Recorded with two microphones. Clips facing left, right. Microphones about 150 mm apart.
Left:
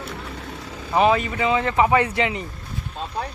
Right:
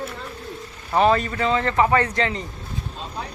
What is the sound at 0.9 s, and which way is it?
Speech, 5° left (ahead or behind).